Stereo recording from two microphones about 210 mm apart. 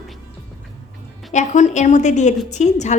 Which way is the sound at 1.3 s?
35° left (ahead or behind).